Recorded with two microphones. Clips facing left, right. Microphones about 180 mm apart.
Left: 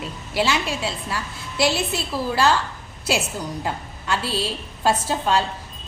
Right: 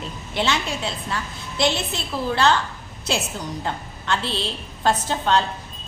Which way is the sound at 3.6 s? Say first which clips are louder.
Even; 5° left (ahead or behind).